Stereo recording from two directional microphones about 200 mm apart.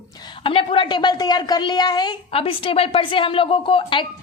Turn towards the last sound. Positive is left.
turn(degrees=25)  # may be behind; listen again after turning